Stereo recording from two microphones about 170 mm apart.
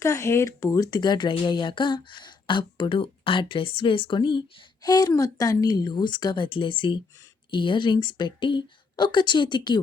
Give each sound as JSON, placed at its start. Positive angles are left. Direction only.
{"t": 0.0, "sound": "speech", "side_deg": 15}